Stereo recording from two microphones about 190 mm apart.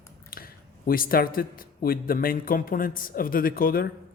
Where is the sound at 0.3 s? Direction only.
50° left (ahead or behind).